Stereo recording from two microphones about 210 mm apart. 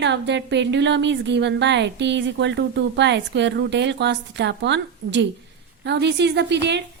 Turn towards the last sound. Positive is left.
turn(degrees=-55)  # may be behind; listen again after turning